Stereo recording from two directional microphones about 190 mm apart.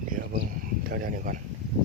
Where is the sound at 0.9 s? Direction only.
50° right (ahead or behind).